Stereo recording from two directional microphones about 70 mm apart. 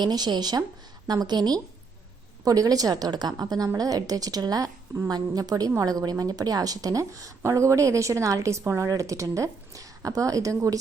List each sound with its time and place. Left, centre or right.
0.0 s a woman's voice: right
2.4 s a woman's voice: right
3.8 s a woman's voice: right